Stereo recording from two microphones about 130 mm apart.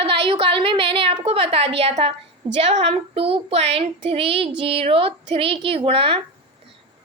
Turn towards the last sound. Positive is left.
turn(degrees=-45)  # may be behind; listen again after turning